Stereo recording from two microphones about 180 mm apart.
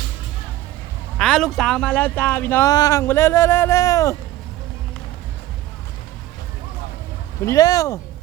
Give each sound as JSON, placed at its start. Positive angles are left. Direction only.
{"t": 1.2, "sound": "speech", "side_deg": 5}
{"t": 7.4, "sound": "speech", "side_deg": 20}